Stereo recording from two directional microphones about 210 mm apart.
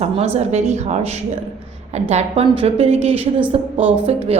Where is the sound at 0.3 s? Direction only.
30° right (ahead or behind).